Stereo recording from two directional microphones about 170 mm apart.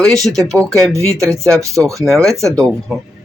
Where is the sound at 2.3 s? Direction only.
15° right (ahead or behind).